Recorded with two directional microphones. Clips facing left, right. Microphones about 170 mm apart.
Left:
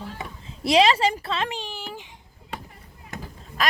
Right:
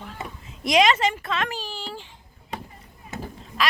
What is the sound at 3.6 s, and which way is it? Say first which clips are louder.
Speech: even; 45° left (ahead or behind).